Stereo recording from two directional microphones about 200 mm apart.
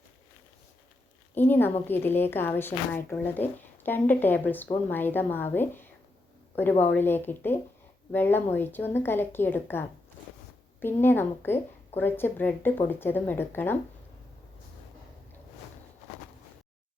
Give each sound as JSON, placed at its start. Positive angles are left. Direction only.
{"t": 1.4, "sound": "a woman's voice", "side_deg": 10}